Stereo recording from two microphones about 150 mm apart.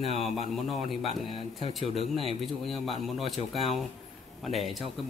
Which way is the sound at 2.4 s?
Centre (ahead or behind).